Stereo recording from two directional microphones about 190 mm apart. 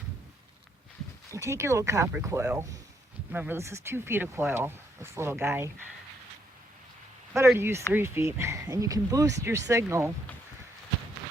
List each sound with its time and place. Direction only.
1.3 s speech: 15° right (ahead or behind)
7.3 s speech: 15° right (ahead or behind)